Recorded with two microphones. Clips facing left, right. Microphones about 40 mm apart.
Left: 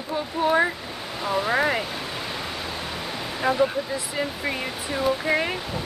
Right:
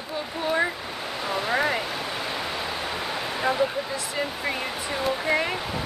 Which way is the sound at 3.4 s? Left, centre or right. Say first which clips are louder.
Left 3 dB; centre.